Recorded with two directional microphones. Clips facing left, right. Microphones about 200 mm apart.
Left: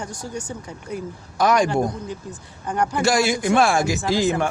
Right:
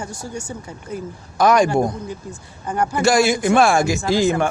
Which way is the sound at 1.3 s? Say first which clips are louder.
Right 3 dB; 50° right (ahead or behind).